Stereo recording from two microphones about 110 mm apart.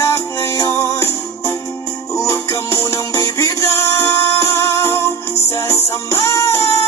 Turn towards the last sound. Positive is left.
turn(degrees=25)  # may be behind; listen again after turning